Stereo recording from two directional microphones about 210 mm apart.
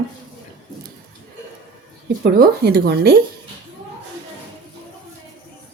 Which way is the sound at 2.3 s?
50° right (ahead or behind).